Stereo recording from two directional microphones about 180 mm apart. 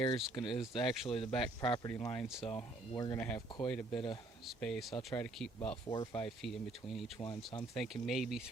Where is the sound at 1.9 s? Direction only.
10° left (ahead or behind).